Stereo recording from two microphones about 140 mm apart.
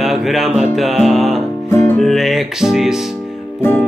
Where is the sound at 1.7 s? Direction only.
20° left (ahead or behind).